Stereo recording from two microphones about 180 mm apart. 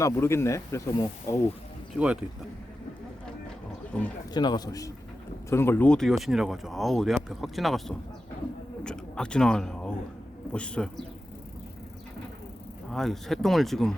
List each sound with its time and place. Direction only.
0.0 s speech: 15° left (ahead or behind)
2.0 s speech: 10° right (ahead or behind)
4.4 s a man's voice: 25° left (ahead or behind); by 11.0 s 5° left (ahead or behind)
12.9 s speech: centre (ahead or behind)